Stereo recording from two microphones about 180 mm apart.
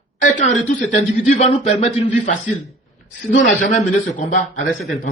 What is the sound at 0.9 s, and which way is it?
A man's voice, 40° left (ahead or behind).